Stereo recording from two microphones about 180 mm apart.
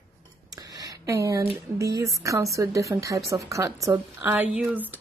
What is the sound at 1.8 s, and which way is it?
Speech, 15° right (ahead or behind).